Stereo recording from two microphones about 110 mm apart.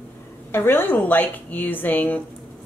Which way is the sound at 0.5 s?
20° left (ahead or behind).